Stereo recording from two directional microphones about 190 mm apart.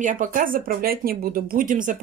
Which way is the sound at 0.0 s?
45° right (ahead or behind).